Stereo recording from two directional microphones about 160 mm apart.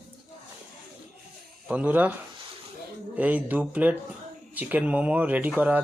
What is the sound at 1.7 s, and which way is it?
Speech, 10° right (ahead or behind).